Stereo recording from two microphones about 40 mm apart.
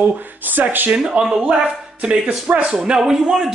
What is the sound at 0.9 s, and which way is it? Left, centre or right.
Speech, right.